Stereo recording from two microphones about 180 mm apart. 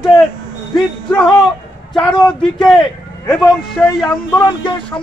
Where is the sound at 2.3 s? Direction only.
5° left (ahead or behind).